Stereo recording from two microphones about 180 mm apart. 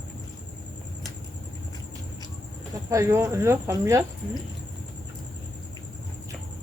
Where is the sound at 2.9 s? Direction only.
15° right (ahead or behind).